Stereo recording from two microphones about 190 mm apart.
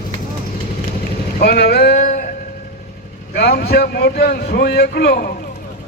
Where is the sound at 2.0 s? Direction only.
40° left (ahead or behind).